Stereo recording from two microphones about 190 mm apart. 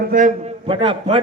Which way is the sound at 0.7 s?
30° right (ahead or behind).